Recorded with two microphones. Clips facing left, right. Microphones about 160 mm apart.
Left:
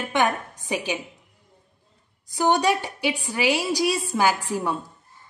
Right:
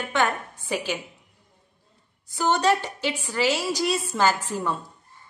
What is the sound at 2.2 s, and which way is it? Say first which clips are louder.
Speech: left 1 dB; 15° left (ahead or behind).